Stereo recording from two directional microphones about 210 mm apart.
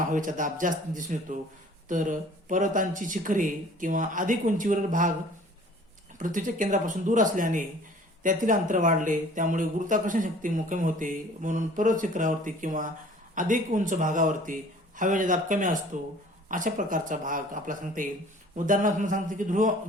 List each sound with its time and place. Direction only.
0.0 s speech: 40° right (ahead or behind)
6.1 s speech: 40° right (ahead or behind)